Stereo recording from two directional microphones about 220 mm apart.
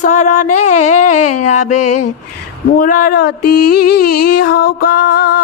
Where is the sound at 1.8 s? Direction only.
90° left.